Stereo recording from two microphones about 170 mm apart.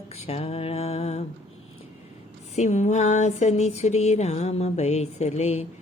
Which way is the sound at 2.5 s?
40° left (ahead or behind).